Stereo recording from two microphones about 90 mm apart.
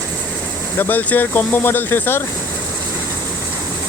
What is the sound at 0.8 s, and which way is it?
Speech, 20° left (ahead or behind).